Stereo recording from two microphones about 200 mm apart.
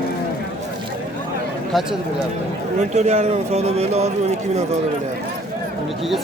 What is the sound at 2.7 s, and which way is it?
Speech, 35° right (ahead or behind).